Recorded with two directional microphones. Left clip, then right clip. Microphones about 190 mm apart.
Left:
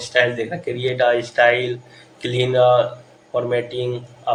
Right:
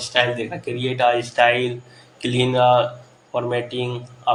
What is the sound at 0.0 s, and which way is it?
Speech, 20° right (ahead or behind).